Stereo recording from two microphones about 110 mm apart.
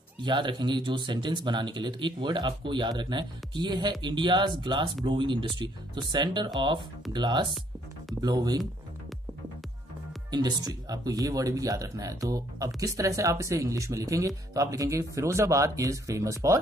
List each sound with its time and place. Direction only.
0.2 s speech: 45° right (ahead or behind)
10.3 s speech: 40° right (ahead or behind)